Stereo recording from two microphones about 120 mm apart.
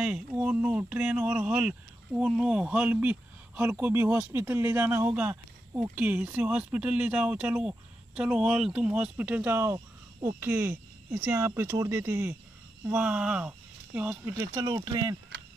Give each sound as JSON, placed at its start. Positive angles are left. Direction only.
{"t": 0.0, "sound": "speech", "side_deg": -10}
{"t": 12.8, "sound": "speech", "side_deg": -10}